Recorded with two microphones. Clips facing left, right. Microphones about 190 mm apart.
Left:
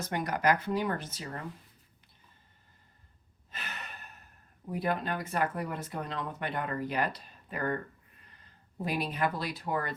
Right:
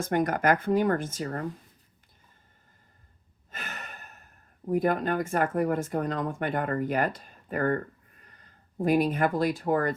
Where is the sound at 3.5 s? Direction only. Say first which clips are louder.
Right 3 dB; 45° right (ahead or behind).